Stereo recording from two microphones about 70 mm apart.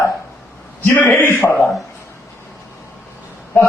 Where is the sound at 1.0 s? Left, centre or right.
Left.